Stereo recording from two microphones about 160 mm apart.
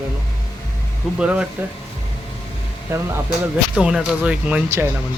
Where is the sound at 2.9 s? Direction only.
15° right (ahead or behind).